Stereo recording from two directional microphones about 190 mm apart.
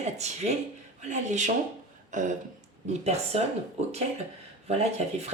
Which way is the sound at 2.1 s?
40° right (ahead or behind).